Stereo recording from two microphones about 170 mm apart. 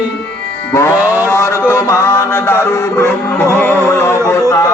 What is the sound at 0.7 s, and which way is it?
Music, 15° left (ahead or behind).